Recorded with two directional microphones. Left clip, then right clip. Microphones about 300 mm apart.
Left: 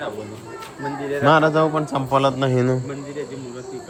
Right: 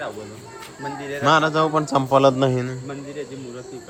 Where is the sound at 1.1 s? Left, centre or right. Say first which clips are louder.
Left 2 dB; centre.